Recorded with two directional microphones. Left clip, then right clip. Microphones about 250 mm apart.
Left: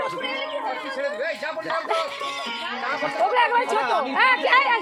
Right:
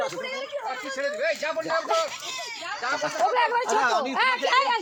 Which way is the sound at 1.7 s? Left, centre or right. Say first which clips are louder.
Left 1 dB; left.